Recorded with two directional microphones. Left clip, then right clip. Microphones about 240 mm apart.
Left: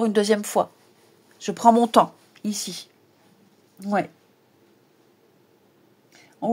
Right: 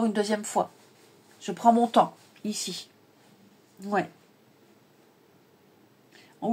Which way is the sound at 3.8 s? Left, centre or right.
Left.